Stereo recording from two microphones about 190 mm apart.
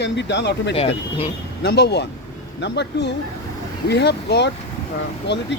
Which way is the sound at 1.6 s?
60° left (ahead or behind).